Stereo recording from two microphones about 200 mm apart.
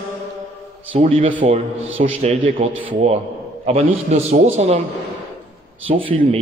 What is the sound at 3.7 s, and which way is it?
A man's voice, 30° right (ahead or behind).